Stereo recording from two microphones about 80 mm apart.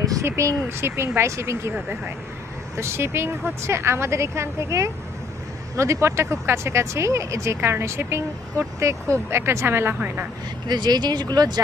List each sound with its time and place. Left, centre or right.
0.0 s speech: right
1.7 s speech: right
2.7 s speech: right
10.7 s speech: right